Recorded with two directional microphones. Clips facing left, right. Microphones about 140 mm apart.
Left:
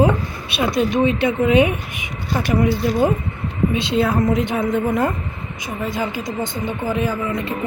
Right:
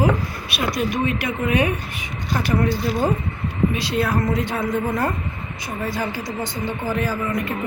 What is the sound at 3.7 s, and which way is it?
Speech, 25° left (ahead or behind).